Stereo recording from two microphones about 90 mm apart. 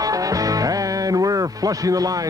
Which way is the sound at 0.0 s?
40° right (ahead or behind).